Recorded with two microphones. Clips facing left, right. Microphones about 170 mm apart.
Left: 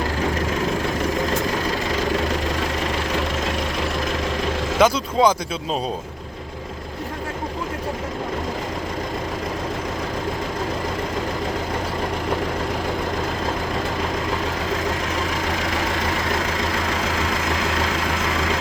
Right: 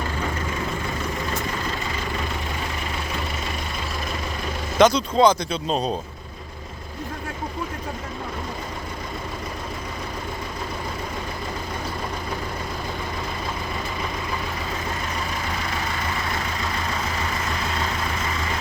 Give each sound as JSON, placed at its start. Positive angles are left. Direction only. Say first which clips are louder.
{"t": 0.3, "sound": "vehicle", "louder": "left 6 dB", "side_deg": 80}
{"t": 4.8, "sound": "speech", "louder": "right 1 dB", "side_deg": 5}
{"t": 14.8, "sound": "vehicle", "louder": "left 5 dB", "side_deg": 90}